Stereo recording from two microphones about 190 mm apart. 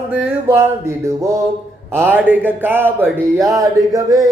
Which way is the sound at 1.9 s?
10° right (ahead or behind).